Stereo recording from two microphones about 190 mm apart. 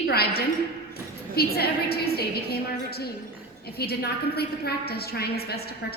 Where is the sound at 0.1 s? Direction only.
55° left (ahead or behind).